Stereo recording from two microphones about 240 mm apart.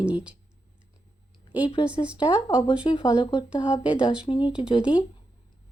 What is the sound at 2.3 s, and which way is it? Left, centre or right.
Speech, centre.